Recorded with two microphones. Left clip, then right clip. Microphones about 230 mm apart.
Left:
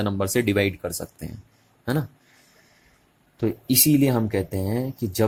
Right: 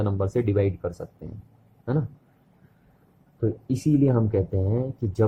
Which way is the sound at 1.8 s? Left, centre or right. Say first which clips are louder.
Left 2 dB; left.